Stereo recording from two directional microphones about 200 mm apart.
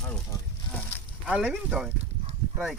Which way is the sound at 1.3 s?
5° right (ahead or behind).